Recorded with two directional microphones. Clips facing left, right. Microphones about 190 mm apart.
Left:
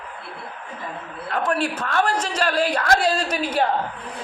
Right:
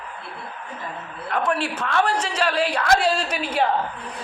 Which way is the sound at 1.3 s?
40° left (ahead or behind).